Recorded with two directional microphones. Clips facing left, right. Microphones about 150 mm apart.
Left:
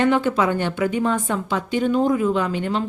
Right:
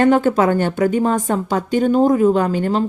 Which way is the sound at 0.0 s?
45° right (ahead or behind).